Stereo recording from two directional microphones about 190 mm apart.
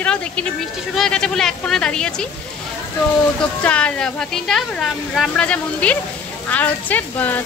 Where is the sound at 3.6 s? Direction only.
5° left (ahead or behind).